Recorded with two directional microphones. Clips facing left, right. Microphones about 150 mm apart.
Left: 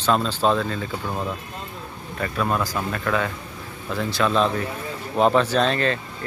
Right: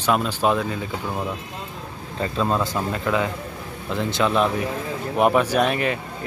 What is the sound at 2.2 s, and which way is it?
Speech, 25° right (ahead or behind).